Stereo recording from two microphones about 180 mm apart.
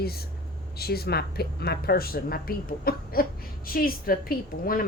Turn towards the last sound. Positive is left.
turn(degrees=55)  # may be behind; listen again after turning